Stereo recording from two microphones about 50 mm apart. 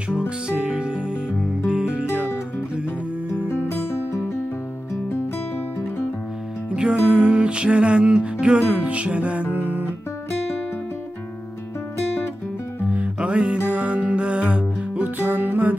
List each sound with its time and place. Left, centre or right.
0.5 s music: centre
3.4 s music: left
6.7 s music: right
12.9 s music: right